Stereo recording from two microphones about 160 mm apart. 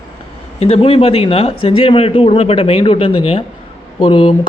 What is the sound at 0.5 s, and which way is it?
Speech, 40° left (ahead or behind).